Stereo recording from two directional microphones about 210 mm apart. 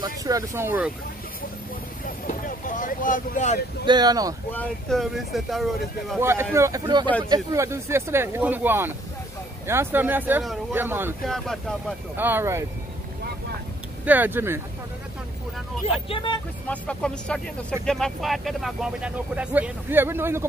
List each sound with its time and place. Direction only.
0.0 s speech: 15° right (ahead or behind)
2.2 s speech: 40° left (ahead or behind)
3.8 s speech: 20° right (ahead or behind)
4.5 s speech: 5° left (ahead or behind)
6.5 s speech: 15° right (ahead or behind)
11.2 s speech: centre (ahead or behind)
12.2 s speech: 10° right (ahead or behind)
14.0 s speech: 10° right (ahead or behind)
16.1 s speech: 25° left (ahead or behind)
16.6 s speech: 5° left (ahead or behind); by 20.4 s 10° right (ahead or behind)